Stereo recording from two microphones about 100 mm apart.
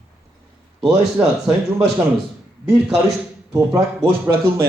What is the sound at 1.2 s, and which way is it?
Speech, 15° right (ahead or behind).